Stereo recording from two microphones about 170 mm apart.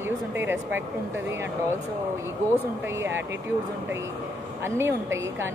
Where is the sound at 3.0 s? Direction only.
15° right (ahead or behind).